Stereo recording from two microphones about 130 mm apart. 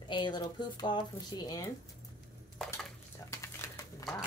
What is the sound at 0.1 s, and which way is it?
Speech, 35° left (ahead or behind).